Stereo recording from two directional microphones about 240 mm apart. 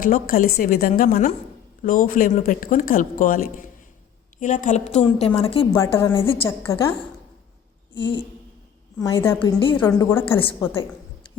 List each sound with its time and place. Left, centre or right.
0.0 s a woman's voice: left
5.7 s a woman's voice: centre
6.5 s a woman's voice: centre
7.9 s a woman's voice: left
9.8 s a woman's voice: centre